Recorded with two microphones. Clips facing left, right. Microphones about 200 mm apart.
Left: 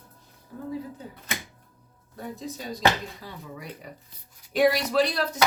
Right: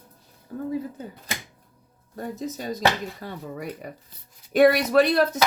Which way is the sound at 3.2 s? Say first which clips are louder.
Right 6 dB; 55° right (ahead or behind).